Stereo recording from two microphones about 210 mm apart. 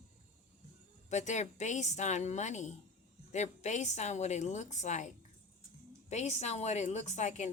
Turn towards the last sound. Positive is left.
turn(degrees=35)  # may be behind; listen again after turning